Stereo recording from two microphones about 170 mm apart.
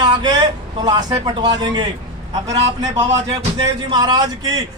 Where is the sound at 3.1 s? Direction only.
25° right (ahead or behind).